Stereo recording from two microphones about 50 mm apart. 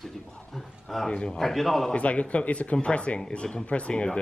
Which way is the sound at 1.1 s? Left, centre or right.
Centre.